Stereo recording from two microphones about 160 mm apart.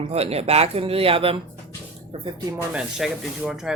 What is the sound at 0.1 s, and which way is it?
Speech, 40° right (ahead or behind).